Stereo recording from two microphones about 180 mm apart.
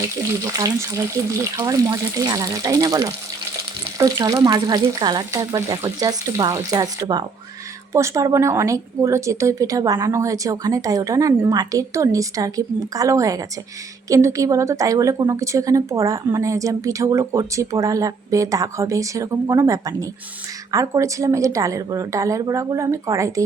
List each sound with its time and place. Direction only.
0.5 s a woman's voice: 20° right (ahead or behind)